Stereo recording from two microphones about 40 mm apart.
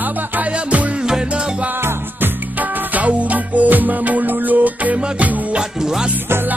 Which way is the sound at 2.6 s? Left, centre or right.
Right.